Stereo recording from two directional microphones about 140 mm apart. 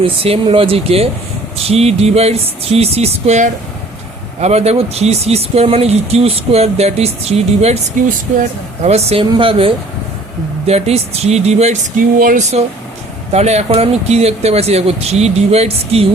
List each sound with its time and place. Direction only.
0.0 s speech: 40° right (ahead or behind)
12.2 s speech: 80° right
13.3 s speech: 50° right (ahead or behind)